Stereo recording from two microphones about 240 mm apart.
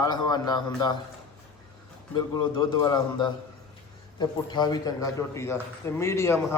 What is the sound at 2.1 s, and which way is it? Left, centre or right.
A man's voice, centre.